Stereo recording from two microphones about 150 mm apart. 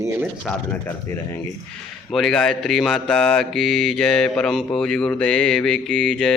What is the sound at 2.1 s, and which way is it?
Mantra, 5° left (ahead or behind).